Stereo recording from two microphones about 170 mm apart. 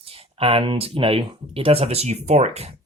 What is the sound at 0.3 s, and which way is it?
Speech, 30° right (ahead or behind).